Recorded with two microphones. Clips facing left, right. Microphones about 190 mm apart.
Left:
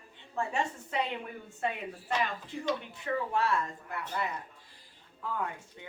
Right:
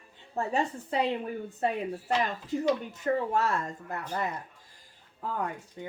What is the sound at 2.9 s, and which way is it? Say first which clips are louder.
A woman's voice: right 4 dB; 45° right (ahead or behind).